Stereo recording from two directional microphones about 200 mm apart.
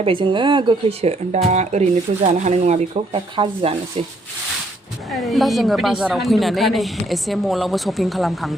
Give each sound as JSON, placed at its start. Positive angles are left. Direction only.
{"t": 0.0, "sound": "speech", "side_deg": -25}
{"t": 5.1, "sound": "speech", "side_deg": 0}